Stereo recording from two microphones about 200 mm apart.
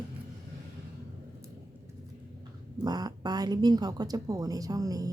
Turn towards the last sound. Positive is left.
turn(degrees=-20)  # may be behind; listen again after turning